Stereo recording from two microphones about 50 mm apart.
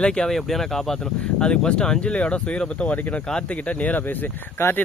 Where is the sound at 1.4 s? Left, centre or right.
Centre.